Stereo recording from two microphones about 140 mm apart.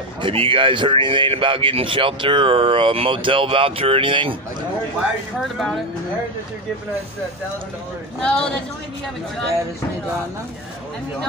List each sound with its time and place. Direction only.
0.2 s speech: 40° right (ahead or behind)
5.4 s speech: centre (ahead or behind)
8.2 s speech: 5° left (ahead or behind)